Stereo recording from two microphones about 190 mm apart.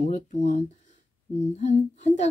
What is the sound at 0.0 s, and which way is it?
Speech, 40° left (ahead or behind).